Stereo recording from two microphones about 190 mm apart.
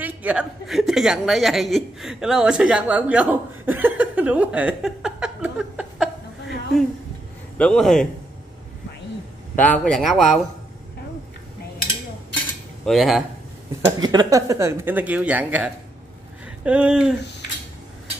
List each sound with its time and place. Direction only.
0.0 s a woman's voice: 5° right (ahead or behind)
7.5 s speech: 5° left (ahead or behind)
9.6 s speech: 5° left (ahead or behind)
12.8 s speech: centre (ahead or behind)
13.8 s speech: 20° right (ahead or behind); by 17.1 s 5° right (ahead or behind)